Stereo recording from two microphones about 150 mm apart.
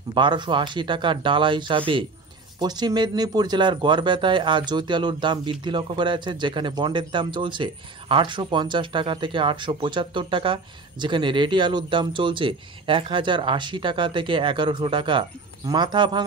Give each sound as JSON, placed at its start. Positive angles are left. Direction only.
{"t": 0.1, "sound": "speech", "side_deg": -30}